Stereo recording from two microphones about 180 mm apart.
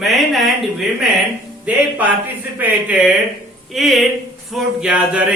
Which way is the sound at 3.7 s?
Centre (ahead or behind).